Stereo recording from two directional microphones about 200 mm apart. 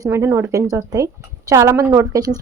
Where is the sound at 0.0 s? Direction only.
15° right (ahead or behind).